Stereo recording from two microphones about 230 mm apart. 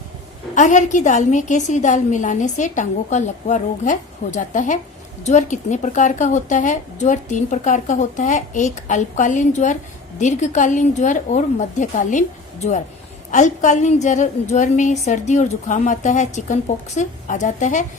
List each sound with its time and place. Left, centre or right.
0.5 s a woman's voice: left